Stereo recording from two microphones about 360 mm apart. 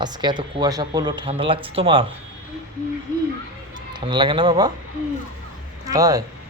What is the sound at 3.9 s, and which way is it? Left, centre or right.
Speech, centre.